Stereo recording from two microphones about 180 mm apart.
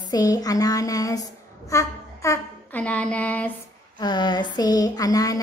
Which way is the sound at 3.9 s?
25° left (ahead or behind).